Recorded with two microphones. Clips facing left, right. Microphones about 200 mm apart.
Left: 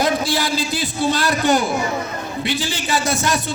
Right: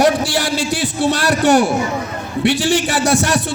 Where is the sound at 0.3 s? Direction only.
75° right (ahead or behind).